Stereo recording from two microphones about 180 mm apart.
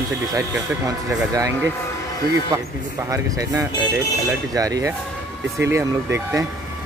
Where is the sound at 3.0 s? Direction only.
20° right (ahead or behind).